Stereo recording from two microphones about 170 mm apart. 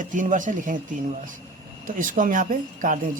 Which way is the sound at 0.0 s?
50° right (ahead or behind).